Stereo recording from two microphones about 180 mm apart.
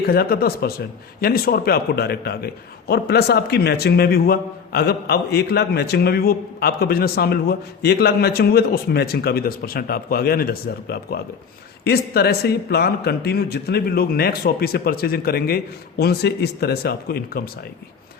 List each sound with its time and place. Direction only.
0.0 s a man's voice: 60° left (ahead or behind)